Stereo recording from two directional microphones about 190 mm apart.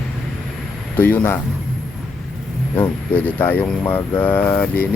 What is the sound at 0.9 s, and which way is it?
Speech, 10° left (ahead or behind).